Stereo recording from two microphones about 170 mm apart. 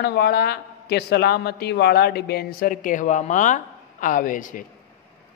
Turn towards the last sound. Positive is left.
turn(degrees=50)  # may be behind; listen again after turning